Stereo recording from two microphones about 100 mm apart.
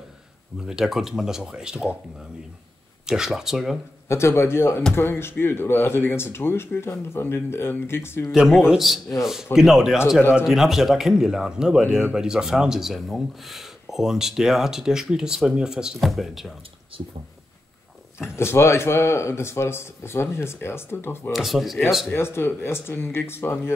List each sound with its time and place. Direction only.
0.6 s speech: 5° right (ahead or behind)
3.1 s speech: 5° right (ahead or behind)
4.1 s speech: 30° left (ahead or behind)
8.3 s speech: centre (ahead or behind)
18.3 s speech: 25° left (ahead or behind)
21.3 s speech: centre (ahead or behind)
22.1 s speech: 25° left (ahead or behind)